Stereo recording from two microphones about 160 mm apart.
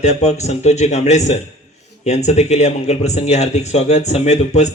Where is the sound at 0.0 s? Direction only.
45° left (ahead or behind).